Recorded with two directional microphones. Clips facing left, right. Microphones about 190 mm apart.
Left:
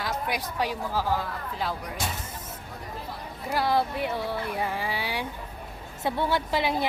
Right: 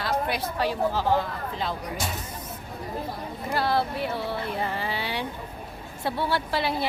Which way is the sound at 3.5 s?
15° left (ahead or behind).